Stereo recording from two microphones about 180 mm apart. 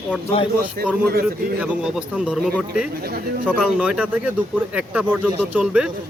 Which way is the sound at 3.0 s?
60° right (ahead or behind).